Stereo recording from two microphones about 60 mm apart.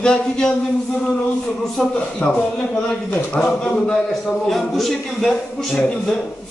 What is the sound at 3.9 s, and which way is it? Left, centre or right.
A man's voice, centre.